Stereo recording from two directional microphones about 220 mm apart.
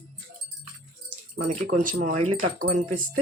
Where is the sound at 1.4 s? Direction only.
35° right (ahead or behind).